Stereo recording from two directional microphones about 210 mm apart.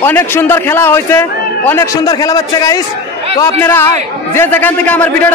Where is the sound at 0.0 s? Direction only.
10° left (ahead or behind).